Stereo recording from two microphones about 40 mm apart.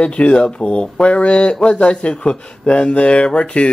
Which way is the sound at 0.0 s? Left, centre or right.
Left.